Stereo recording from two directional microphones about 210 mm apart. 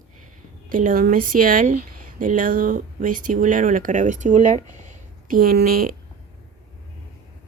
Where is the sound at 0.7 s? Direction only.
40° right (ahead or behind).